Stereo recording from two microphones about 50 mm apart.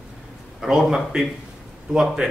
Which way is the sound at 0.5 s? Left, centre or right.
Centre.